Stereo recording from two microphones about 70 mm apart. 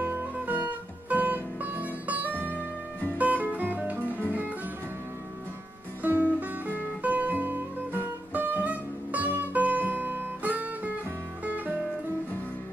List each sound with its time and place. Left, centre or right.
0.0 s music: right
6.0 s music: right
8.6 s music: right